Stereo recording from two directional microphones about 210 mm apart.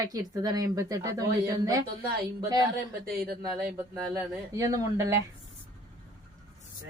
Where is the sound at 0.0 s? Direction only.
15° right (ahead or behind).